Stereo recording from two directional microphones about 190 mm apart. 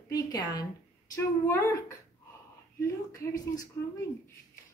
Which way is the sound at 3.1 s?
20° left (ahead or behind).